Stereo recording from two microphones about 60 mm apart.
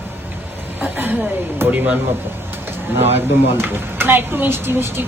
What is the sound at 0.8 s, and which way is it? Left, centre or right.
Chuckle, right.